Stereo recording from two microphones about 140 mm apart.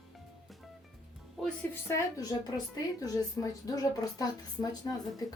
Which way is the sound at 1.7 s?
25° left (ahead or behind).